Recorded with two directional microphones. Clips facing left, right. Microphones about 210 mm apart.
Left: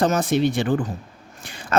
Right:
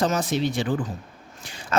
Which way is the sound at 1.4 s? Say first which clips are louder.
Left 4 dB; 55° left (ahead or behind).